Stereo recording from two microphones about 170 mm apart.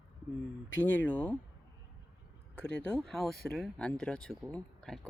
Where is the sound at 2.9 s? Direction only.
Centre (ahead or behind).